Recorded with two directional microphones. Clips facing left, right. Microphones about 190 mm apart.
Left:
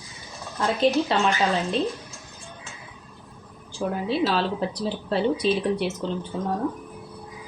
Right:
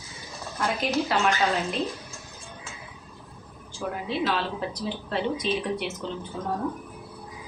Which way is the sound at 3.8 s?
35° left (ahead or behind).